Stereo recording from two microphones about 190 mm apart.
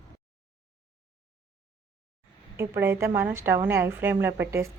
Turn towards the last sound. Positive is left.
turn(degrees=-10)  # may be behind; listen again after turning